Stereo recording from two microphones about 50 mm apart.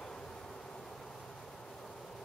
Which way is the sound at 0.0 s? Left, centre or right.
Centre.